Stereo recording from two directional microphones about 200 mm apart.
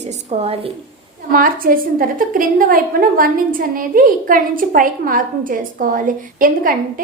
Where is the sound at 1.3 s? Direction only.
45° right (ahead or behind).